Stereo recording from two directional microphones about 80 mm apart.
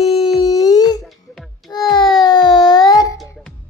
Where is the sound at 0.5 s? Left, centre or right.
Left.